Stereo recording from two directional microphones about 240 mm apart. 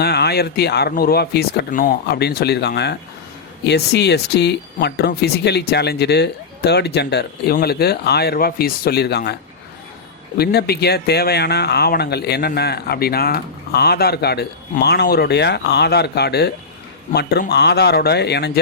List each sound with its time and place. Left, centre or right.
0.0 s speech: left
10.3 s speech: left